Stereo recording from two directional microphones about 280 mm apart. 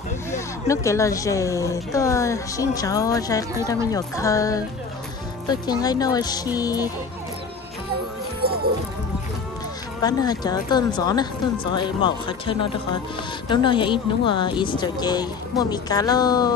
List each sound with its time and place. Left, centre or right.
0.3 s speech: centre
8.4 s music: right
10.0 s speech: centre